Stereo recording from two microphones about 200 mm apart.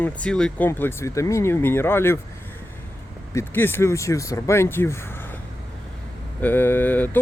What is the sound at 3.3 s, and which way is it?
Speech, 10° left (ahead or behind).